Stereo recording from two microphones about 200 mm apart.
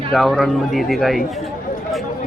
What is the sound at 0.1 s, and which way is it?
A man's voice, centre (ahead or behind).